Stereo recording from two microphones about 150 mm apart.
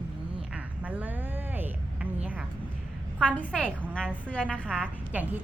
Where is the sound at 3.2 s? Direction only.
5° left (ahead or behind).